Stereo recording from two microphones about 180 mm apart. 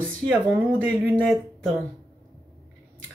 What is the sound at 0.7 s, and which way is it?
Speech, 10° right (ahead or behind).